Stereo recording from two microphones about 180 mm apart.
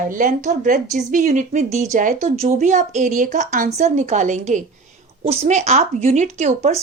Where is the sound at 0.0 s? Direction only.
50° right (ahead or behind).